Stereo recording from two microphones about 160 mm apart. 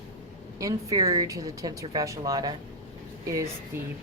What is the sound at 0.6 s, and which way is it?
Speech, 20° right (ahead or behind).